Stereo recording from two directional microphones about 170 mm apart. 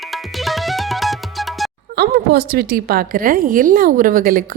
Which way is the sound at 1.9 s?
65° right (ahead or behind).